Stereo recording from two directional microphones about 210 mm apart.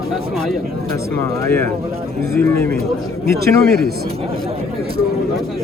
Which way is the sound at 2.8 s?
45° right (ahead or behind).